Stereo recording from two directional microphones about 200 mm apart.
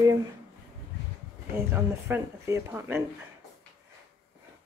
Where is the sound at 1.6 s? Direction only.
10° right (ahead or behind).